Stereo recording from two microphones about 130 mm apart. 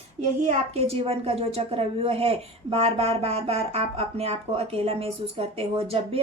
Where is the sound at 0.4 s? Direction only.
55° right (ahead or behind).